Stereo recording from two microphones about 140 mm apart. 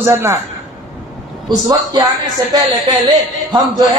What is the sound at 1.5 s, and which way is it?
A woman's voice, 25° right (ahead or behind).